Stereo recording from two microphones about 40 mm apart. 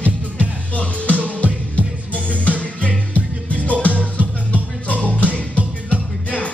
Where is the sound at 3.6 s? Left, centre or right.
Left.